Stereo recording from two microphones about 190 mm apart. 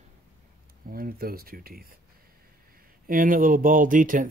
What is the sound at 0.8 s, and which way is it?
Speech, 50° right (ahead or behind).